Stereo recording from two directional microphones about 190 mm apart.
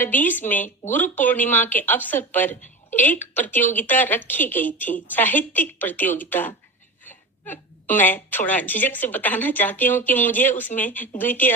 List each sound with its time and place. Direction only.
0.0 s speech: 10° left (ahead or behind)